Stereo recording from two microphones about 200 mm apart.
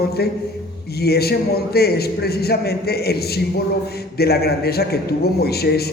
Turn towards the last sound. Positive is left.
turn(degrees=50)  # may be behind; listen again after turning